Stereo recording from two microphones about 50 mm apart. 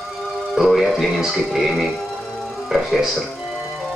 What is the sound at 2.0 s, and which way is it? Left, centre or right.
Music, centre.